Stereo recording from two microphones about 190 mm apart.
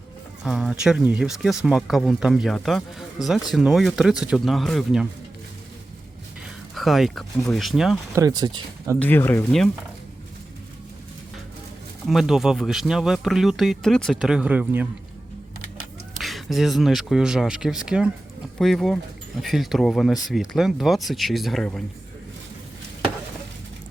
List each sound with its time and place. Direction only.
0.4 s speech: 5° right (ahead or behind)
6.7 s speech: centre (ahead or behind)
8.1 s speech: 20° right (ahead or behind)
9.0 s speech: 10° left (ahead or behind)
12.0 s speech: centre (ahead or behind)
16.1 s speech: centre (ahead or behind)